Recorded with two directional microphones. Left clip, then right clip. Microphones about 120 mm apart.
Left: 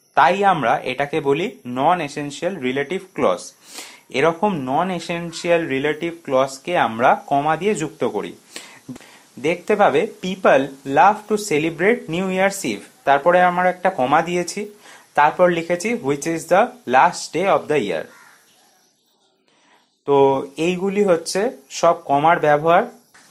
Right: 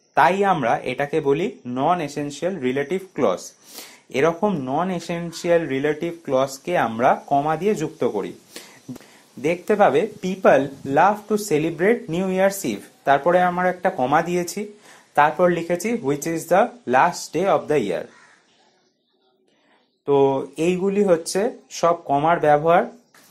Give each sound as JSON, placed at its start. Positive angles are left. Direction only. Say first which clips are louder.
{"t": 0.1, "sound": "speech", "louder": "left 2 dB", "side_deg": -25}
{"t": 7.2, "sound": "speech", "louder": "left 2 dB", "side_deg": -15}
{"t": 20.1, "sound": "speech", "louder": "left 3 dB", "side_deg": -15}